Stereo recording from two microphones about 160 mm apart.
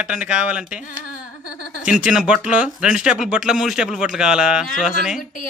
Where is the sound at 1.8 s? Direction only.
5° right (ahead or behind).